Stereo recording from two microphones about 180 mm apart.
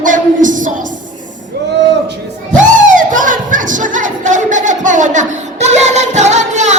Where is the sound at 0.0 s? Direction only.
45° right (ahead or behind).